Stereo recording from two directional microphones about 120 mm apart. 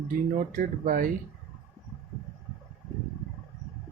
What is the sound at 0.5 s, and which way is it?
Speech, 90° right.